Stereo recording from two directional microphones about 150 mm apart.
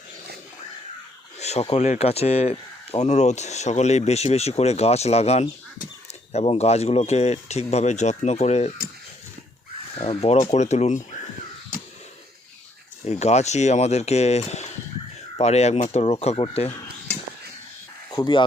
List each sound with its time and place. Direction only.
1.4 s a sound: 45° left (ahead or behind)
1.7 s speech: 45° left (ahead or behind)
10.0 s speech: 40° left (ahead or behind)
13.1 s speech: 45° left (ahead or behind)
18.1 s speech: 30° left (ahead or behind)